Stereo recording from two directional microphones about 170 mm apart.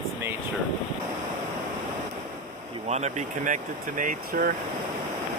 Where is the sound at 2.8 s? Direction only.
40° right (ahead or behind).